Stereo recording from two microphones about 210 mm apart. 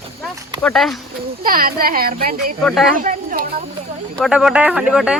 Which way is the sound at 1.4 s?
45° right (ahead or behind).